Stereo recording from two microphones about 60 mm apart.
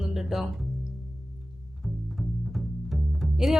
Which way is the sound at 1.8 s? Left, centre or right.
Centre.